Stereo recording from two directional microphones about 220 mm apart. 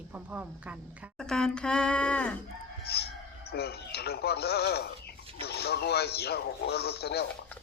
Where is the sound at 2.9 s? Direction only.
45° left (ahead or behind).